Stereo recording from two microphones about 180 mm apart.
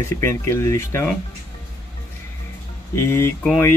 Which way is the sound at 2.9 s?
15° left (ahead or behind).